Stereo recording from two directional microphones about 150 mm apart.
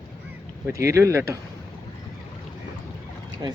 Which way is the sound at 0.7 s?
20° right (ahead or behind).